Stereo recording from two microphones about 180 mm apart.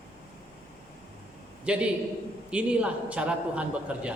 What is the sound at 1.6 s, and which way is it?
A man's voice, 5° right (ahead or behind).